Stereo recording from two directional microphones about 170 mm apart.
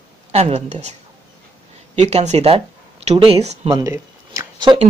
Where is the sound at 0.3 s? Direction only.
40° right (ahead or behind).